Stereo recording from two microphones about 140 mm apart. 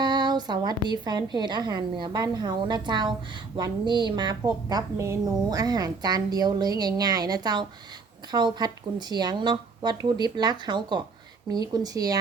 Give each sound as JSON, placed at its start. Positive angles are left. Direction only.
{"t": 0.0, "sound": "a woman's voice", "side_deg": -30}